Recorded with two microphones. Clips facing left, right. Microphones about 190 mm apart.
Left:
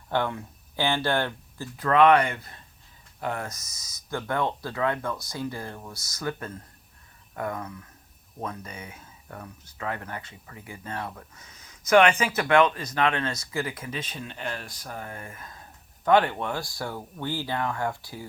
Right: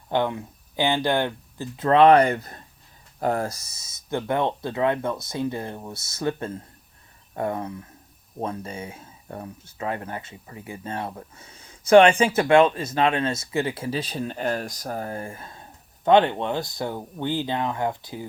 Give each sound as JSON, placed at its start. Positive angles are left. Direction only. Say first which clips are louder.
{"t": 0.1, "sound": "speech", "louder": "right 3 dB", "side_deg": -20}